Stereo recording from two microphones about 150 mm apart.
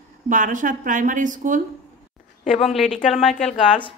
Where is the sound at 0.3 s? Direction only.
60° right (ahead or behind).